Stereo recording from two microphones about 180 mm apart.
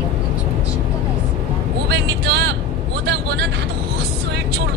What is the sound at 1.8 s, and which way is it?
Speech, 70° right (ahead or behind).